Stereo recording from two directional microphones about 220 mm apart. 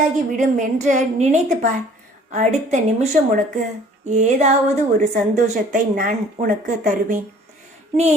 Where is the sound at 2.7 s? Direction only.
35° right (ahead or behind).